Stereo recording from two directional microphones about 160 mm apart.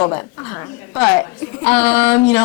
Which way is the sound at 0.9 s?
15° left (ahead or behind).